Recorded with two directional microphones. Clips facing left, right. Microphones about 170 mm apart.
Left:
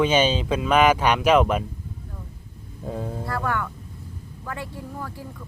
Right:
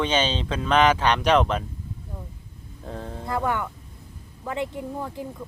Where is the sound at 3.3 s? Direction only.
20° right (ahead or behind).